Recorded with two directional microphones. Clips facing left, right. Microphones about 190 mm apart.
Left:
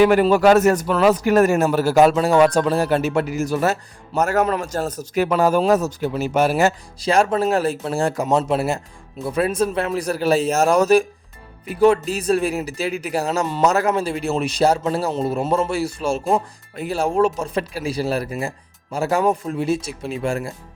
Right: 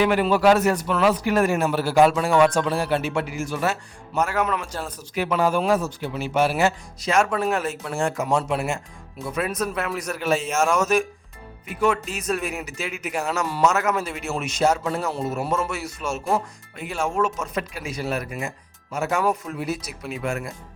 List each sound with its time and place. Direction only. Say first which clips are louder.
0.0 s a man's voice: left 5 dB; 45° left (ahead or behind)